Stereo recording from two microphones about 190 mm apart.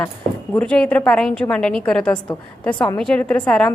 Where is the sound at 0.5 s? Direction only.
5° left (ahead or behind).